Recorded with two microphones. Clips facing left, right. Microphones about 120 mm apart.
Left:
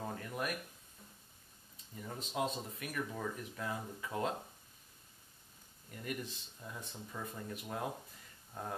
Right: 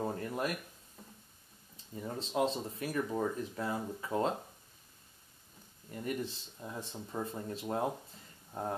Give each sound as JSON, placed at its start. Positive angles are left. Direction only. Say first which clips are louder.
{"t": 0.0, "sound": "speech", "louder": "right 5 dB", "side_deg": -25}
{"t": 2.0, "sound": "speech", "louder": "right 5 dB", "side_deg": -30}
{"t": 6.0, "sound": "speech", "louder": "right 5 dB", "side_deg": -30}